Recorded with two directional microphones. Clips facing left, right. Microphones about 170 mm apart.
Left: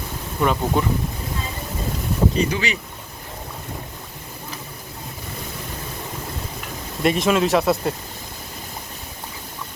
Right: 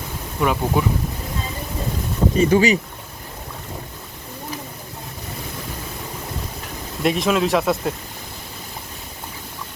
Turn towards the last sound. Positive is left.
turn(degrees=0)  # may be behind; listen again after turning